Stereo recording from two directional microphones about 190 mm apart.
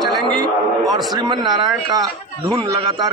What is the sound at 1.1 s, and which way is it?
A man's voice, 20° right (ahead or behind).